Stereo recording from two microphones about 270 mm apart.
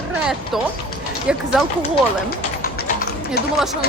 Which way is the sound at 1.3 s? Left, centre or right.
Centre.